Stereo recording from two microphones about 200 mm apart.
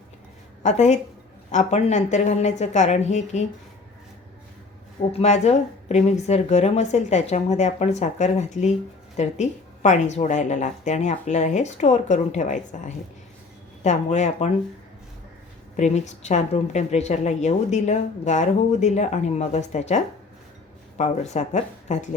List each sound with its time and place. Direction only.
0.6 s a woman's voice: 35° left (ahead or behind)
5.1 s a woman's voice: 35° left (ahead or behind)
15.7 s a woman's voice: 35° left (ahead or behind)
21.0 s a woman's voice: 35° left (ahead or behind)